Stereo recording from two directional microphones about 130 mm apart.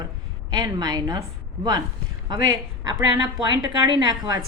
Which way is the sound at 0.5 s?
30° right (ahead or behind).